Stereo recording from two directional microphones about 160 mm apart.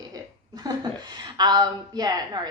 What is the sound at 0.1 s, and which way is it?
A woman's voice, 25° right (ahead or behind).